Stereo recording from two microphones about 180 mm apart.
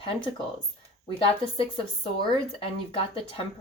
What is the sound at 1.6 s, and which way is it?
Speech, 30° left (ahead or behind).